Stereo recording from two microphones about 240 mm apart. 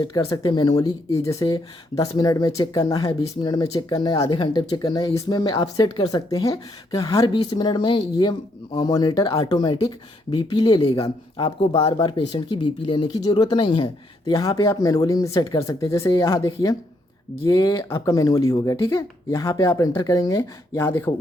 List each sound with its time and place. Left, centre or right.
0.0 s speech: centre